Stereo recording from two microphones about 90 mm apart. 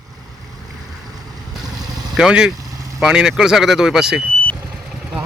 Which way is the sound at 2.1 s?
10° right (ahead or behind).